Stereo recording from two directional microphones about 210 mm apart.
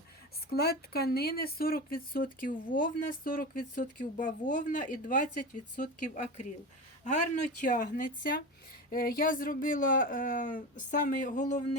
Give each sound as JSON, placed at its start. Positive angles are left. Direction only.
{"t": 0.5, "sound": "speech", "side_deg": 50}
{"t": 7.0, "sound": "speech", "side_deg": 35}